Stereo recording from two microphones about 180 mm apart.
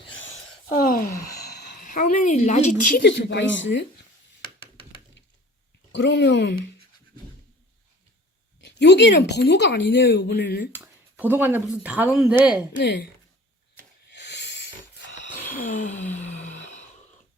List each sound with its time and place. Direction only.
0.8 s wail: 50° left (ahead or behind)
1.8 s speech: 50° left (ahead or behind)
2.9 s speech: 70° left (ahead or behind); by 3.8 s 90° left
5.9 s speech: 80° left
8.8 s speech: 70° left (ahead or behind)
10.8 s speech: 10° right (ahead or behind)
12.7 s speech: 75° left (ahead or behind)
14.1 s a sound: 75° left (ahead or behind)
15.5 s a sound: 45° left (ahead or behind)